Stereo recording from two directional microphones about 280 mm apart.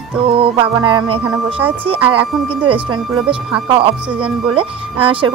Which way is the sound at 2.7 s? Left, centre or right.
Centre.